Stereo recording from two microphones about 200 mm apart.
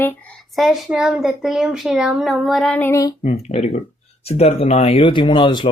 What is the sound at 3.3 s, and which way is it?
Speech, 35° left (ahead or behind).